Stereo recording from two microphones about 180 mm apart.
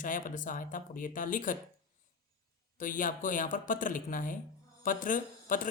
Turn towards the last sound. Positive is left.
turn(degrees=50)  # may be behind; listen again after turning